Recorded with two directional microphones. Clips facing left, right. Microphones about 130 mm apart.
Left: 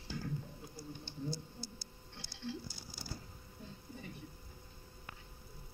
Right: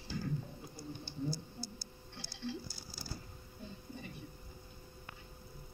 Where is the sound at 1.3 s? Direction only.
5° right (ahead or behind).